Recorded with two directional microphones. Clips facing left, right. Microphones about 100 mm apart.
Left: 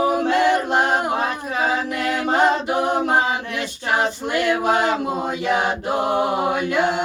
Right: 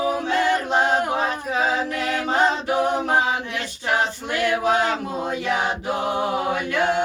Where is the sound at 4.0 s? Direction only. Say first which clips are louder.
Left 4 dB; 15° left (ahead or behind).